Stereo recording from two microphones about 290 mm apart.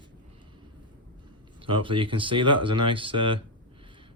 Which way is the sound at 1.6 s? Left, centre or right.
Centre.